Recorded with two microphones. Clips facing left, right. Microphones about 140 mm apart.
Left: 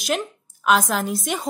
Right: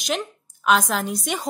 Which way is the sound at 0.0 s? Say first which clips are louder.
Left 2 dB; centre (ahead or behind).